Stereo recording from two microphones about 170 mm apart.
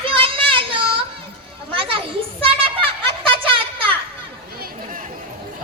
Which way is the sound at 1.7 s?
30° right (ahead or behind).